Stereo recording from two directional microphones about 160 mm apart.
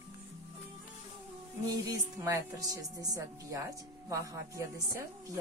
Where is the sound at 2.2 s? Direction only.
20° right (ahead or behind).